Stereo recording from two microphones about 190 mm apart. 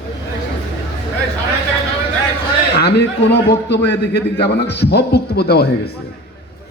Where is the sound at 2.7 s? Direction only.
60° left (ahead or behind).